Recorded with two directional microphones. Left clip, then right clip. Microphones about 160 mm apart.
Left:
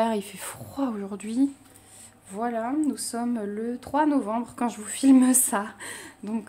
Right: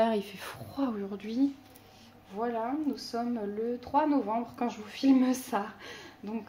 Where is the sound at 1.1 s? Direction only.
50° left (ahead or behind).